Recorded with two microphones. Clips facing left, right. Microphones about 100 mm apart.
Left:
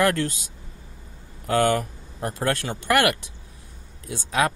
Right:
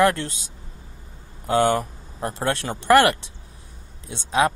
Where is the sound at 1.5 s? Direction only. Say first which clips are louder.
Right 1 dB; 25° right (ahead or behind).